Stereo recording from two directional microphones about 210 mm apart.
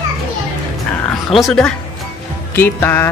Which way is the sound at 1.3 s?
Centre (ahead or behind).